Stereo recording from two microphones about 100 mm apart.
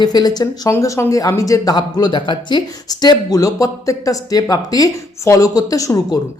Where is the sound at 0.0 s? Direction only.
45° left (ahead or behind).